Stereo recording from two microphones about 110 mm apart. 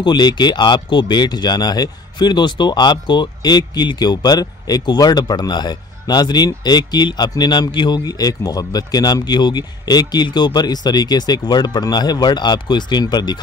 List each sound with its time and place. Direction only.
0.0 s speech: 45° left (ahead or behind)